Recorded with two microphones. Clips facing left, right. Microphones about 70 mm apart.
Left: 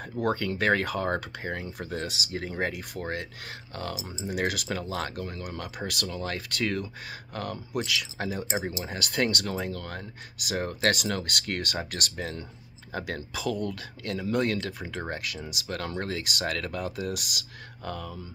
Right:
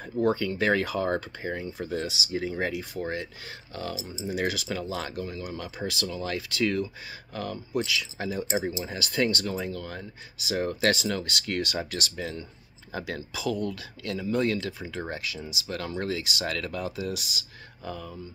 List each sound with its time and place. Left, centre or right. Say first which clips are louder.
0.0 s speech: right 3 dB; left
1.2 s speech: right 1 dB; left
7.1 s speech: even; left
14.2 s speech: right 1 dB; left